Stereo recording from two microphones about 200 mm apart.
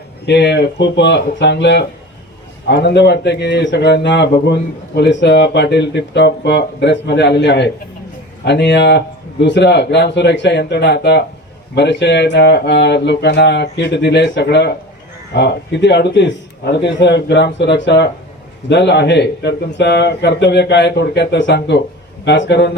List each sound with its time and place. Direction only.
0.3 s speech: 55° left (ahead or behind)